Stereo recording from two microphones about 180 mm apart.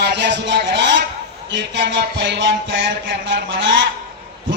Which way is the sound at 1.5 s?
90° right.